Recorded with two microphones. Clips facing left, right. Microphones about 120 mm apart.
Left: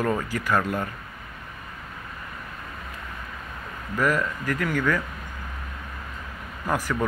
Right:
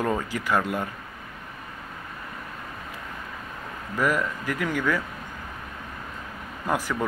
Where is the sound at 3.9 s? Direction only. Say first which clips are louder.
Left 1 dB; 15° right (ahead or behind).